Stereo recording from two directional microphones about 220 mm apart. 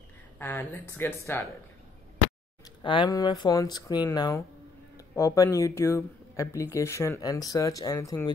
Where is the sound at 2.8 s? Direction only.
20° left (ahead or behind).